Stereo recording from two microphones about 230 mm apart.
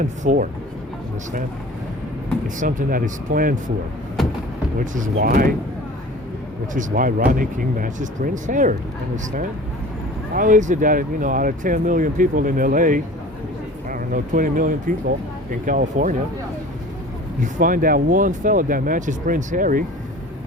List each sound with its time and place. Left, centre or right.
0.0 s speech: right
2.6 s speech: right
4.9 s speech: right
6.7 s speech: right
17.4 s speech: right